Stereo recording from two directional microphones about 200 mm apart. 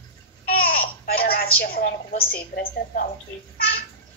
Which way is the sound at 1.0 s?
50° left (ahead or behind).